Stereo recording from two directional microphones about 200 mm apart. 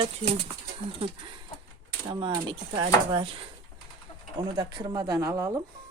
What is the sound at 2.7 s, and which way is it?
Speech, 25° right (ahead or behind).